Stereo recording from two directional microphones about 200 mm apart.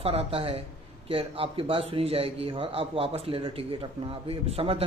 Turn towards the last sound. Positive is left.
turn(degrees=-30)  # may be behind; listen again after turning